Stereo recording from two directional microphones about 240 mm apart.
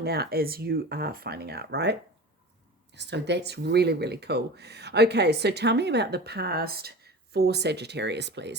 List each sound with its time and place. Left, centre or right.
0.0 s speech: right